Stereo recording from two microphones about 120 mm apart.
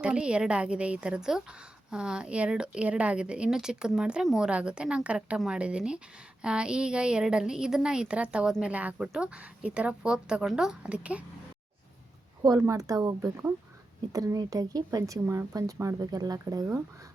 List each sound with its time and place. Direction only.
0.0 s a woman's voice: 10° right (ahead or behind)
12.4 s speech: 25° right (ahead or behind)